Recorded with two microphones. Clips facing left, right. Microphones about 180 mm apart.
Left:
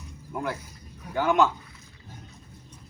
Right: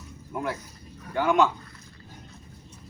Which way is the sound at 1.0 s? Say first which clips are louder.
Even; centre (ahead or behind).